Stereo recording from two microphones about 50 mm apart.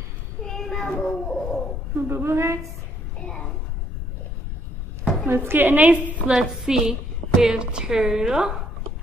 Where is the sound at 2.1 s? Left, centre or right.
Right.